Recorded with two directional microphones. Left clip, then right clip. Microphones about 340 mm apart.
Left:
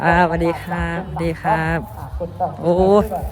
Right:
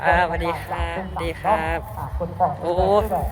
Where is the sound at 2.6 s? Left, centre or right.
Left.